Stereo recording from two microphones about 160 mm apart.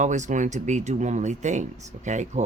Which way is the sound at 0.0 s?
50° right (ahead or behind).